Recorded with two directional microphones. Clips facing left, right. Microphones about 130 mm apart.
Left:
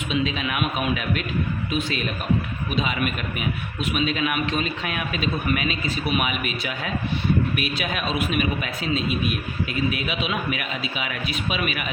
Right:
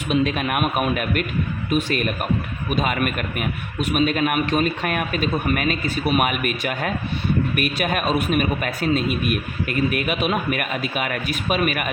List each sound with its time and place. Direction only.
0.1 s a man's voice: 55° right (ahead or behind)